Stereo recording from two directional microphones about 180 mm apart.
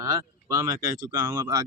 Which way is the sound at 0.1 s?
20° right (ahead or behind).